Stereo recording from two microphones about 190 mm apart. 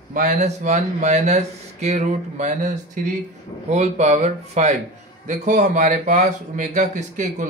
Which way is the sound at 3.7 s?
35° right (ahead or behind).